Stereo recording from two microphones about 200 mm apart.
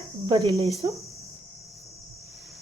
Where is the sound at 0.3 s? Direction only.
15° right (ahead or behind).